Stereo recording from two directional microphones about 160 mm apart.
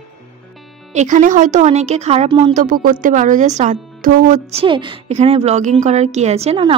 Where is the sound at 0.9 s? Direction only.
50° right (ahead or behind); by 2.5 s 35° right (ahead or behind).